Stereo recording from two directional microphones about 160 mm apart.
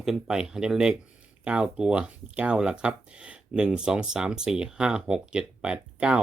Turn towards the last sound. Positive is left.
turn(degrees=-5)  # may be behind; listen again after turning